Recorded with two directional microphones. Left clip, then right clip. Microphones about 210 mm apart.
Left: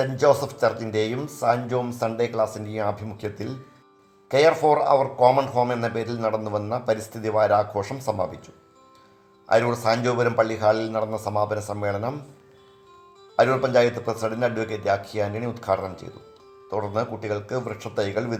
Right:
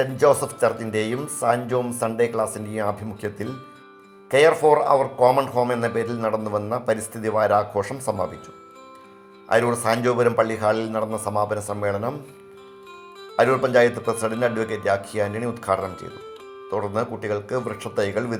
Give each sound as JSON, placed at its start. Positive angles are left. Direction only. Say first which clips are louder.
{"t": 0.0, "sound": "speech", "louder": "right 1 dB", "side_deg": -25}
{"t": 9.5, "sound": "speech", "louder": "even", "side_deg": -25}
{"t": 13.3, "sound": "speech", "louder": "right 1 dB", "side_deg": -25}